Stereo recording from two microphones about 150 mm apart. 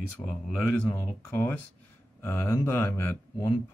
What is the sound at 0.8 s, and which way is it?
Speech, 15° left (ahead or behind).